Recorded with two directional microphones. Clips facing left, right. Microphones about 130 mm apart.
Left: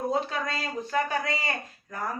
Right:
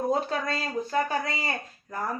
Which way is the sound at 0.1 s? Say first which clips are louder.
Right 2 dB; 40° right (ahead or behind).